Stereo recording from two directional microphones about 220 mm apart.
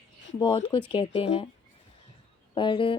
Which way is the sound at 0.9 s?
25° left (ahead or behind).